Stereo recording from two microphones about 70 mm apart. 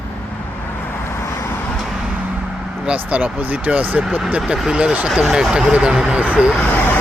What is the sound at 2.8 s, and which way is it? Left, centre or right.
Speech, centre.